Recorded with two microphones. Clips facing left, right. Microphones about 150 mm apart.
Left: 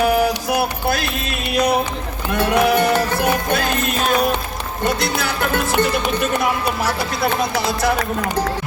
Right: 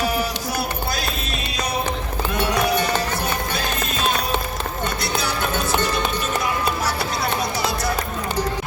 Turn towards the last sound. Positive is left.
turn(degrees=55)  # may be behind; listen again after turning